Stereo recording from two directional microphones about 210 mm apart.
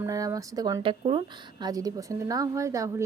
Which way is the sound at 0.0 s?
15° right (ahead or behind).